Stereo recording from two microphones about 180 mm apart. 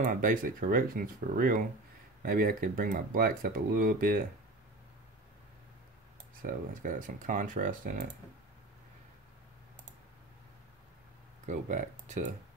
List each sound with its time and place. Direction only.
0.0 s speech: 50° right (ahead or behind)
6.4 s speech: 50° right (ahead or behind)
11.4 s speech: 45° right (ahead or behind)